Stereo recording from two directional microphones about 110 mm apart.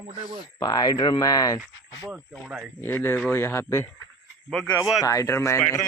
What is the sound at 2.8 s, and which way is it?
Speech, 20° left (ahead or behind).